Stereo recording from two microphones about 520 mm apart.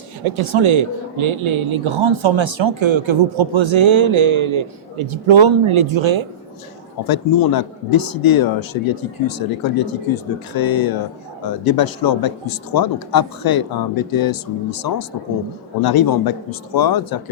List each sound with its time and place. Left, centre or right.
0.3 s a man's voice: right
7.1 s speech: left